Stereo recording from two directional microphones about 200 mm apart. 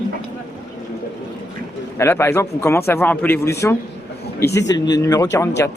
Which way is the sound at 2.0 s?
15° left (ahead or behind).